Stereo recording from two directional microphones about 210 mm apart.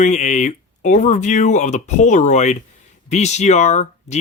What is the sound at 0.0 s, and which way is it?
Speech, 35° left (ahead or behind).